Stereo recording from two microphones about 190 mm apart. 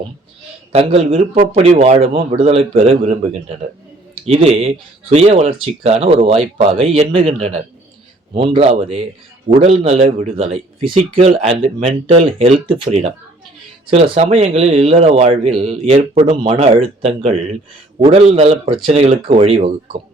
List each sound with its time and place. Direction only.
0.7 s a man's voice: 30° right (ahead or behind)